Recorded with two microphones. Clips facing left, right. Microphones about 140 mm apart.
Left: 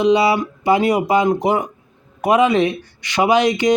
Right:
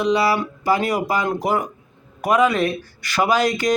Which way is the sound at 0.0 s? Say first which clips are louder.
Left 4 dB; 20° left (ahead or behind).